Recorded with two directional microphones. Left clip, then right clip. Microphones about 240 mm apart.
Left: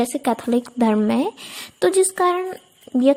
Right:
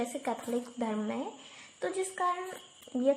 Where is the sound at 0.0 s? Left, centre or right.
Left.